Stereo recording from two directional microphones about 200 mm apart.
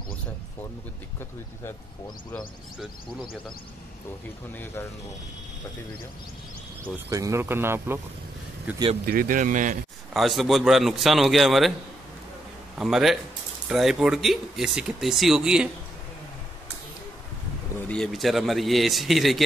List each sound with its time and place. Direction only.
2.3 s speech: centre (ahead or behind)
7.1 s speech: 15° right (ahead or behind)
9.0 s speech: 45° right (ahead or behind)
10.1 s speech: centre (ahead or behind)
12.7 s speech: centre (ahead or behind)
17.7 s speech: 5° left (ahead or behind)